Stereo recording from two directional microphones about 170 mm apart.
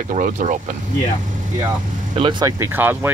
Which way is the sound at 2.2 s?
25° right (ahead or behind).